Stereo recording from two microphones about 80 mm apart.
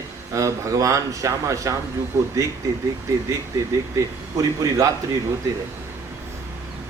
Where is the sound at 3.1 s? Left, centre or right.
Right.